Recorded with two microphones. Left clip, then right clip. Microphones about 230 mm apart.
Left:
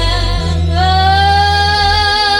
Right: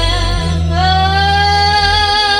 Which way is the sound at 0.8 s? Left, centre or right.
Left.